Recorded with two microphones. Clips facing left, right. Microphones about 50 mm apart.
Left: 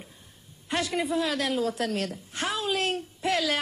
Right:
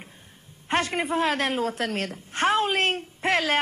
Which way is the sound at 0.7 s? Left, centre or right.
Right.